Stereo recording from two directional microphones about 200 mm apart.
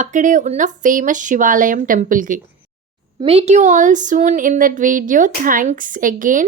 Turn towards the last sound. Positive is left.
turn(degrees=-45)  # may be behind; listen again after turning